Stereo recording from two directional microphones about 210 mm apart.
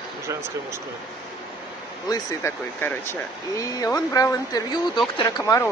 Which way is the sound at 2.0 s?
10° left (ahead or behind).